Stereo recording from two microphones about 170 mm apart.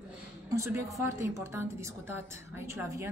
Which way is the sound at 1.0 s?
15° right (ahead or behind).